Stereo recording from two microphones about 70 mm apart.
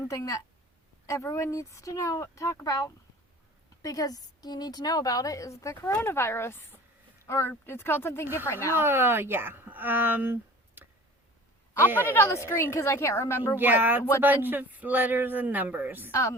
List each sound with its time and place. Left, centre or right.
0.0 s a woman's voice: left
6.1 s a woman's voice: left
8.7 s a woman's voice: right
10.8 s tick: right
11.9 s a woman's voice: left
13.6 s a man's voice: right